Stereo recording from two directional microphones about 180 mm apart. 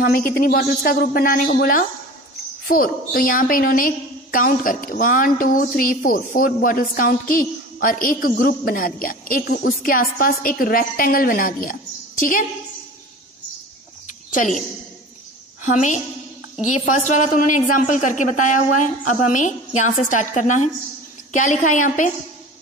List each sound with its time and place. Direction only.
0.0 s a woman's voice: 55° left (ahead or behind)
14.3 s a woman's voice: 45° left (ahead or behind)
15.6 s a woman's voice: 45° left (ahead or behind)